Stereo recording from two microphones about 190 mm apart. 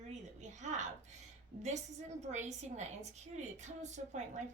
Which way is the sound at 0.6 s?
40° right (ahead or behind).